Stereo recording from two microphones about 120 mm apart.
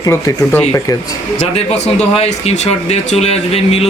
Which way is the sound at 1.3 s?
65° left (ahead or behind).